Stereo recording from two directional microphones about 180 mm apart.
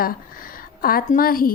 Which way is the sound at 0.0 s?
50° left (ahead or behind).